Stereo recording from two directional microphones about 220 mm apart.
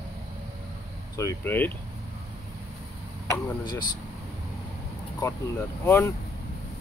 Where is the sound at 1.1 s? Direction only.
10° left (ahead or behind).